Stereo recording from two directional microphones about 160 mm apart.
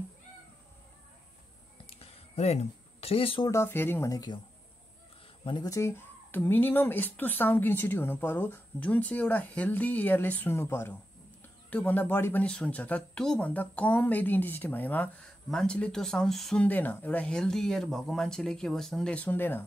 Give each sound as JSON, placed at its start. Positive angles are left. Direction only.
{"t": 1.9, "sound": "a sound", "side_deg": 40}
{"t": 3.4, "sound": "speech", "side_deg": 15}
{"t": 5.4, "sound": "speech", "side_deg": 30}
{"t": 5.7, "sound": "speech", "side_deg": 15}